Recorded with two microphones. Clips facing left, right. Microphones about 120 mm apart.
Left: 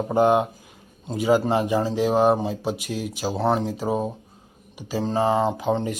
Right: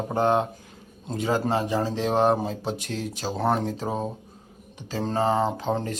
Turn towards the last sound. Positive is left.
turn(degrees=0)  # may be behind; listen again after turning